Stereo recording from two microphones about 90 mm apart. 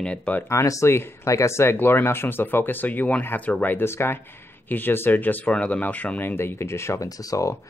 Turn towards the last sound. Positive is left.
turn(degrees=40)  # may be behind; listen again after turning